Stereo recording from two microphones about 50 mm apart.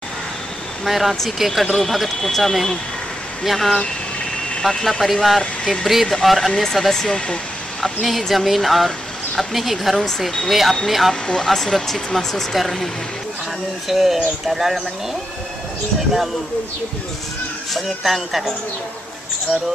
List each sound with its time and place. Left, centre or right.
0.8 s speech: centre
5.4 s speech: centre
6.0 s speech: centre
7.8 s speech: centre
10.5 s speech: centre
17.8 s speech: centre